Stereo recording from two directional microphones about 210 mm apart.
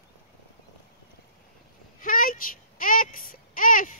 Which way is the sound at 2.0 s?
40° left (ahead or behind).